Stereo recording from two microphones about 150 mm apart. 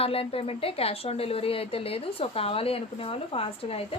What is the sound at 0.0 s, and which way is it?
A woman's voice, 40° left (ahead or behind).